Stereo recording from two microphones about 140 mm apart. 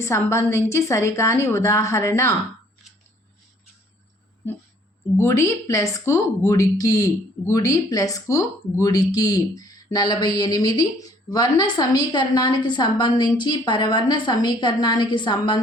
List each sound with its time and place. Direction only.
0.0 s a woman's voice: 20° left (ahead or behind)
5.1 s a woman's voice: 20° left (ahead or behind)